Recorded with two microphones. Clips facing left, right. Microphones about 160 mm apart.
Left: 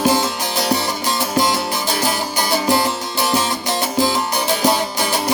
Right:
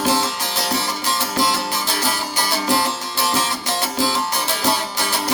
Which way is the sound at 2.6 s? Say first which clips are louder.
Left 3 dB; 15° left (ahead or behind).